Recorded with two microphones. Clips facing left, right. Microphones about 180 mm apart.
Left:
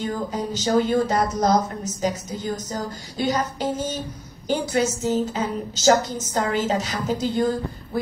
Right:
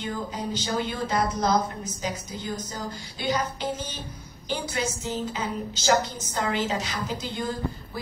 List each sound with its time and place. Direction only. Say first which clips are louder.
0.0 s a woman's voice: left 5 dB; 45° left (ahead or behind)